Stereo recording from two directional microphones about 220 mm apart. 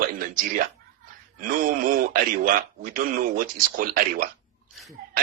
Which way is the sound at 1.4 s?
40° right (ahead or behind).